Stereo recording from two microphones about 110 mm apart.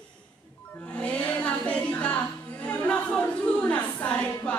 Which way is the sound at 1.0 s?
10° left (ahead or behind).